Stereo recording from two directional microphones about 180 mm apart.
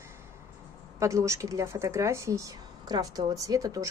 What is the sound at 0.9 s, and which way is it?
Speech, 15° right (ahead or behind).